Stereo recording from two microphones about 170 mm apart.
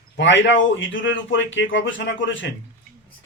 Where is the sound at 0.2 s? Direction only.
90° left.